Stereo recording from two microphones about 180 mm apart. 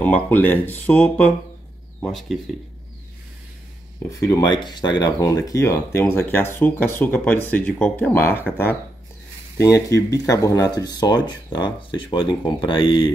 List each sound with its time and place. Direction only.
0.0 s speech: 10° left (ahead or behind)
4.1 s speech: 20° left (ahead or behind)
9.6 s speech: 15° left (ahead or behind)